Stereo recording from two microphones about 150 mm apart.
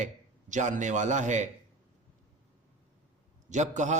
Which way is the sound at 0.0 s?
55° right (ahead or behind).